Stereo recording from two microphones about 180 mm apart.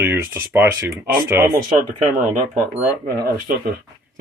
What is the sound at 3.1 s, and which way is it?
Speech, 55° right (ahead or behind).